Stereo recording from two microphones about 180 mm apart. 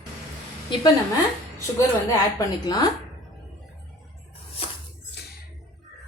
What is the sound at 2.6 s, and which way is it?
Speech, 20° left (ahead or behind).